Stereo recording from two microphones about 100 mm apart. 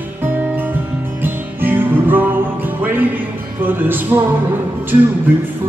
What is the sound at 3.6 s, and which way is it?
Music, 20° right (ahead or behind).